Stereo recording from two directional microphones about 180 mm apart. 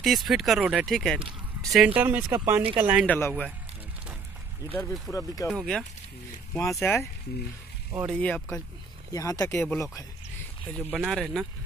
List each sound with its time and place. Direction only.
0.0 s speech: centre (ahead or behind)
2.0 s speech: 10° right (ahead or behind)
3.1 s speech: 10° left (ahead or behind)
4.6 s speech: centre (ahead or behind)
5.1 s speech: 20° left (ahead or behind)
5.5 s speech: centre (ahead or behind)
6.5 s speech: 10° left (ahead or behind)
8.1 s speech: 10° left (ahead or behind)
9.1 s speech: 20° left (ahead or behind)
9.6 s speech: 5° left (ahead or behind)